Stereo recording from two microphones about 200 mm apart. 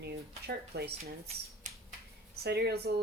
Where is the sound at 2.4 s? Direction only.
55° right (ahead or behind).